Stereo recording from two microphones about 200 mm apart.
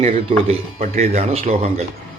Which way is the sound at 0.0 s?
30° right (ahead or behind).